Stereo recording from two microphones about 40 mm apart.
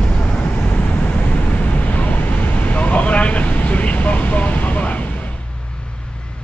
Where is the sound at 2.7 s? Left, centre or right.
Left.